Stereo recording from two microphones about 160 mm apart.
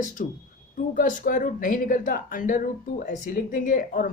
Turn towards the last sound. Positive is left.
turn(degrees=55)  # may be behind; listen again after turning